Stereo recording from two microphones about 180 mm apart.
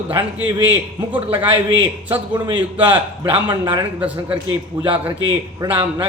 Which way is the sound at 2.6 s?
10° right (ahead or behind).